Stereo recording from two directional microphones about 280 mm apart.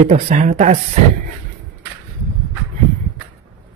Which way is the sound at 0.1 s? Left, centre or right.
Right.